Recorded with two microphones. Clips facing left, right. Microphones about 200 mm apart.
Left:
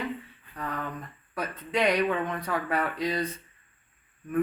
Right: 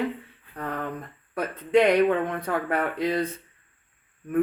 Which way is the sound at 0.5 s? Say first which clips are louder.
Right 3 dB; 55° right (ahead or behind).